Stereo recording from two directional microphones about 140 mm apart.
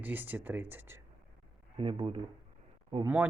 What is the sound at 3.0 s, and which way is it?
Speech, 15° right (ahead or behind).